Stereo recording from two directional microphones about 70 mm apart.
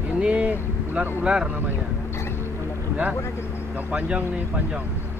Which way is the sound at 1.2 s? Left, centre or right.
Centre.